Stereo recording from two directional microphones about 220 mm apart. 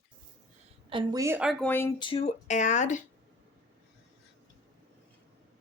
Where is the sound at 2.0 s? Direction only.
25° left (ahead or behind).